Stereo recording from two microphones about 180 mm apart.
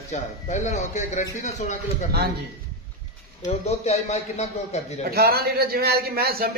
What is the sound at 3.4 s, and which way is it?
Speech, 40° left (ahead or behind).